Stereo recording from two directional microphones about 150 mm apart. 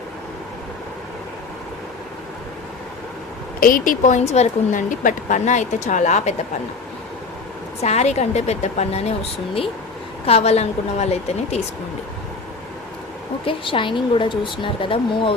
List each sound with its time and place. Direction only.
3.6 s speech: 70° left (ahead or behind); by 6.3 s 50° left (ahead or behind)
7.8 s speech: 45° left (ahead or behind)
10.2 s speech: 45° left (ahead or behind)
13.4 s speech: 35° left (ahead or behind)